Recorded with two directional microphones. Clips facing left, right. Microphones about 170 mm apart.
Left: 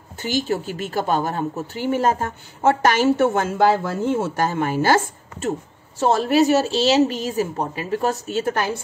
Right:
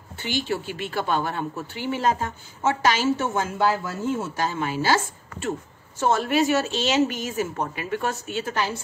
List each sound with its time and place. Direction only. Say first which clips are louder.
0.2 s a woman's voice: left 4 dB; 45° left (ahead or behind); by 4.3 s 90° left
4.4 s speech: left 5 dB; 50° left (ahead or behind)
5.9 s a woman's voice: left 4 dB; 35° left (ahead or behind); by 8.7 s 50° left (ahead or behind)